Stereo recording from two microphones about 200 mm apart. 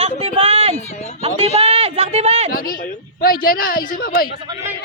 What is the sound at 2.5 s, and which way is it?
A woman's voice, 45° left (ahead or behind).